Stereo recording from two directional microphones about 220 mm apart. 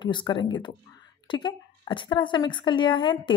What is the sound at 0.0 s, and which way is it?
A woman's voice, 20° left (ahead or behind).